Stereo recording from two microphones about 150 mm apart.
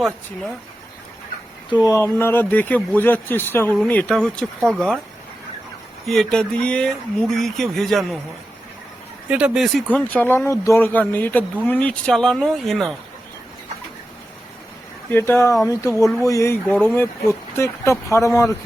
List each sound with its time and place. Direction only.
2.0 s speech: 15° left (ahead or behind)
6.1 s speech: centre (ahead or behind)
9.3 s speech: 5° right (ahead or behind)
9.9 s speech: 10° left (ahead or behind)
15.1 s speech: 15° left (ahead or behind)